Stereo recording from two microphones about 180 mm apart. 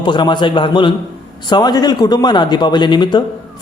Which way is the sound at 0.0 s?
25° left (ahead or behind).